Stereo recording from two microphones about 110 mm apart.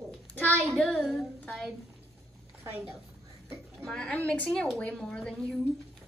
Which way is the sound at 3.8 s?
10° left (ahead or behind).